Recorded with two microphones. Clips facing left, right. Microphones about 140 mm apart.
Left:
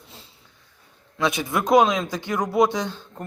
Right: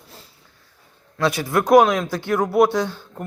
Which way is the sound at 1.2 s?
20° left (ahead or behind).